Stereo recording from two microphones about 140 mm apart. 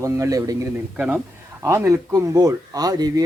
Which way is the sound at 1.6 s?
20° right (ahead or behind).